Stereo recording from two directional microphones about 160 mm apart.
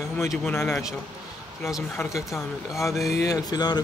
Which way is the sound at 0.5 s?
15° left (ahead or behind).